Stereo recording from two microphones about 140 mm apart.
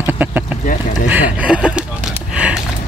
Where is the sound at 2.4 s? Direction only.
10° right (ahead or behind).